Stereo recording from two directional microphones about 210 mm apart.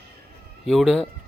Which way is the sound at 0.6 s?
Centre (ahead or behind).